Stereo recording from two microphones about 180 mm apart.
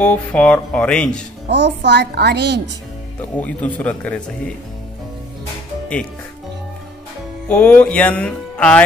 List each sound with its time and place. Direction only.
0.0 s speech: 5° left (ahead or behind)
1.5 s a woman's voice: 70° right (ahead or behind)
3.2 s speech: 10° left (ahead or behind)
7.4 s speech: 10° left (ahead or behind)